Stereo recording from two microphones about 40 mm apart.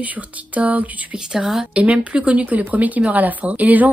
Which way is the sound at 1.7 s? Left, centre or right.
Right.